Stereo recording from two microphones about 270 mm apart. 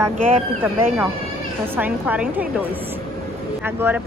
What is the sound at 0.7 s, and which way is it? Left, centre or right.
Speech, centre.